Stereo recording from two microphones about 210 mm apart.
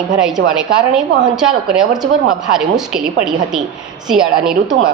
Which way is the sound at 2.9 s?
Centre (ahead or behind).